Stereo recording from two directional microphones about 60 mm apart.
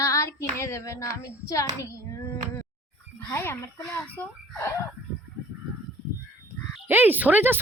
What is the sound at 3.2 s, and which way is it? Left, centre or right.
Speech, left.